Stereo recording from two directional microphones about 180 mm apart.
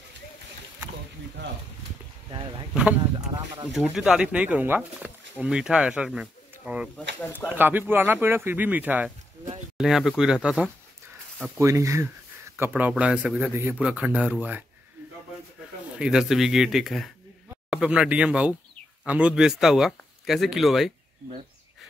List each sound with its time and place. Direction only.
2.7 s speech: 5° right (ahead or behind)
3.0 s speech: 25° right (ahead or behind)
3.7 s speech: 5° right (ahead or behind)
11.5 s speech: 15° right (ahead or behind)
16.0 s speech: 5° right (ahead or behind)